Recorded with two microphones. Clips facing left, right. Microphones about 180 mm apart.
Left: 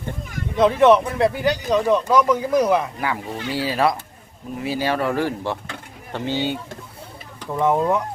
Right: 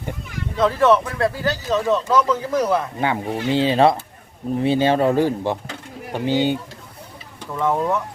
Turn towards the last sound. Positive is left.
turn(degrees=10)  # may be behind; listen again after turning